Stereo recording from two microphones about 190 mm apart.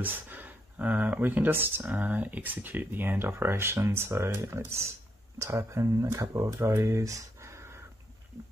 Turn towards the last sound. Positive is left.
turn(degrees=-15)  # may be behind; listen again after turning